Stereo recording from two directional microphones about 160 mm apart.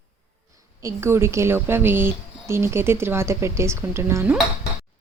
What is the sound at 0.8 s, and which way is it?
A woman's voice, 15° right (ahead or behind).